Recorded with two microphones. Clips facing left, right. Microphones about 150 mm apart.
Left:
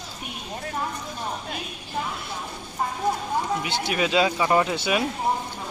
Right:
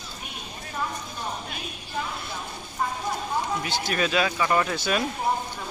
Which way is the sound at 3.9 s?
20° left (ahead or behind).